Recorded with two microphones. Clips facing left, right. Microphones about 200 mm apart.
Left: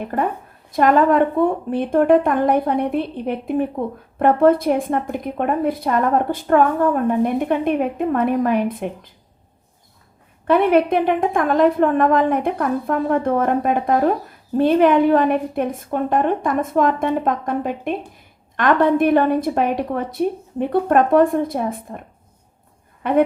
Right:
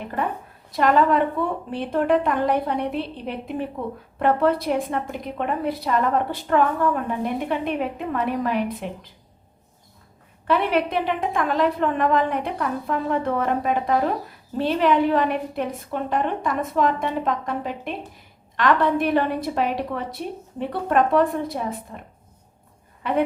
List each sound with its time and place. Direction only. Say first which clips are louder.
0.0 s a woman's voice: left 5 dB; 45° left (ahead or behind)
10.4 s a woman's voice: left 6 dB; 50° left (ahead or behind)
23.0 s a woman's voice: left 5 dB; 50° left (ahead or behind)